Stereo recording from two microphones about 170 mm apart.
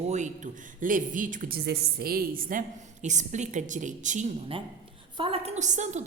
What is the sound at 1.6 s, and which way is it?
A woman's voice, 70° right (ahead or behind).